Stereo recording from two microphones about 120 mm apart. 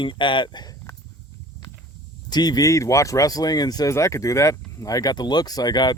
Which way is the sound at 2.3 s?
35° left (ahead or behind).